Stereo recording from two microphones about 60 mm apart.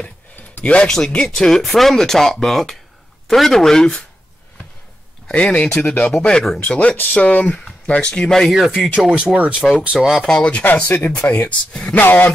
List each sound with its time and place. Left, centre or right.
0.7 s speech: left
5.3 s speech: centre
6.1 s speech: centre
6.8 s speech: left; by 8.6 s centre
8.6 s speech: centre
9.1 s speech: centre
9.6 s speech: centre
10.2 s speech: centre
10.6 s speech: left
10.9 s speech: centre
11.2 s speech: left